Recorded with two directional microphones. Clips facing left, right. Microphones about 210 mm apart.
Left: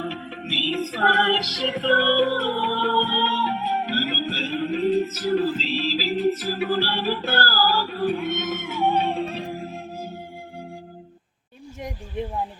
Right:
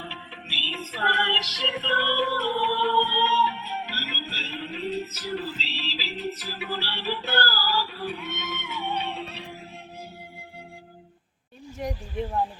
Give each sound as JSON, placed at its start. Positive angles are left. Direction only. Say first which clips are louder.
{"t": 0.0, "sound": "music", "louder": "left 10 dB", "side_deg": 45}